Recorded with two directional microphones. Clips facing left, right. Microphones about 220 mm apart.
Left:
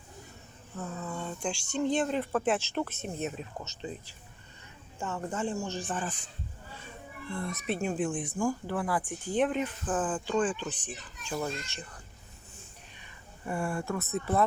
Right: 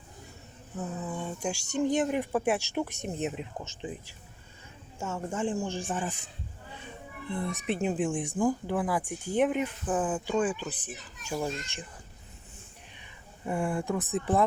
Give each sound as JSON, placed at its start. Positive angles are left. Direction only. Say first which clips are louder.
{"t": 0.8, "sound": "speech", "louder": "right 2 dB", "side_deg": -15}
{"t": 1.5, "sound": "speech", "louder": "right 2 dB", "side_deg": -40}
{"t": 1.8, "sound": "speech", "louder": "right 2 dB", "side_deg": -15}
{"t": 7.3, "sound": "speech", "louder": "right 2 dB", "side_deg": -15}
{"t": 13.4, "sound": "speech", "louder": "right 3 dB", "side_deg": -20}